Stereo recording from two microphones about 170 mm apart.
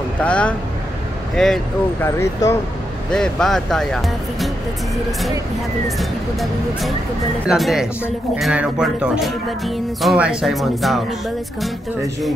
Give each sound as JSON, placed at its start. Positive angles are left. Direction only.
{"t": 0.2, "sound": "speech", "side_deg": 5}
{"t": 2.0, "sound": "speech", "side_deg": 15}
{"t": 3.1, "sound": "speech", "side_deg": 5}
{"t": 5.9, "sound": "speech", "side_deg": 0}